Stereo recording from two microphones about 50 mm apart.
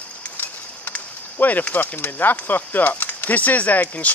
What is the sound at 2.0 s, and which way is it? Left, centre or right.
Speech, left.